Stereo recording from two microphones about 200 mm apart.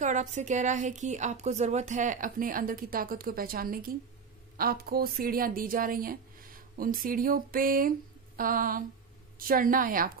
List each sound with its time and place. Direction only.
0.0 s a woman's voice: 35° right (ahead or behind)